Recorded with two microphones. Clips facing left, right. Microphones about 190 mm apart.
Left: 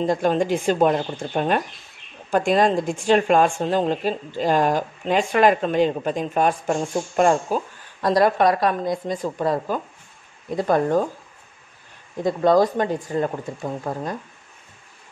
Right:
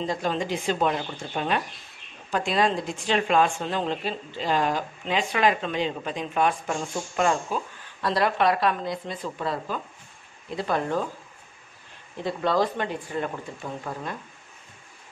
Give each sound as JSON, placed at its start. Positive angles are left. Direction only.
{"t": 0.0, "sound": "speech", "side_deg": 50}
{"t": 12.2, "sound": "speech", "side_deg": 45}